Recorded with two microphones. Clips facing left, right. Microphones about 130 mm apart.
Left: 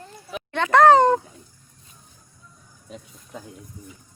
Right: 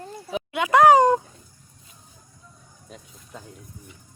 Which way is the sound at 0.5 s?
10° right (ahead or behind).